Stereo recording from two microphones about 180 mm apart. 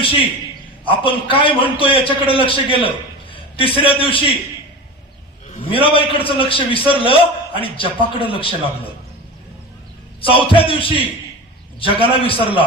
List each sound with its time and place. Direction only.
0.9 s a man's voice: 30° left (ahead or behind)
3.6 s a man's voice: 30° left (ahead or behind)
5.5 s a man's voice: 30° left (ahead or behind)
10.2 s a man's voice: 30° left (ahead or behind)